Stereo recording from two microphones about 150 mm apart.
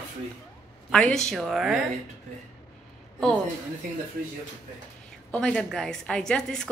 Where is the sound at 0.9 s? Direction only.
5° left (ahead or behind).